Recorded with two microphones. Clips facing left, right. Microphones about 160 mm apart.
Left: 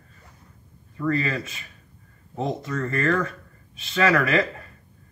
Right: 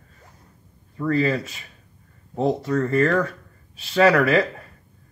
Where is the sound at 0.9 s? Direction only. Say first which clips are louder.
Right 4 dB; 35° right (ahead or behind).